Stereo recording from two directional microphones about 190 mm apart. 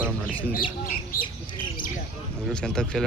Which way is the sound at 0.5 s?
50° left (ahead or behind).